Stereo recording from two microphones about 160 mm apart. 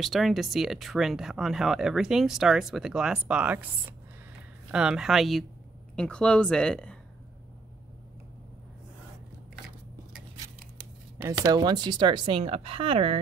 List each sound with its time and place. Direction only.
0.0 s speech: centre (ahead or behind)
4.6 s speech: 5° right (ahead or behind)
11.2 s speech: 25° right (ahead or behind)